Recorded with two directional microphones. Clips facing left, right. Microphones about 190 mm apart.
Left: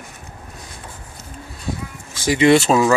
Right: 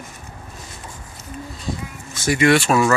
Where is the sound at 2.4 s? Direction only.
20° left (ahead or behind).